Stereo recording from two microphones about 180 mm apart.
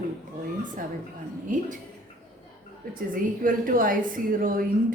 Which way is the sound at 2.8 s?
55° right (ahead or behind).